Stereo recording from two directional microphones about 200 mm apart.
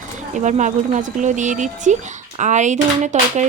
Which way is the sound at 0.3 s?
40° right (ahead or behind).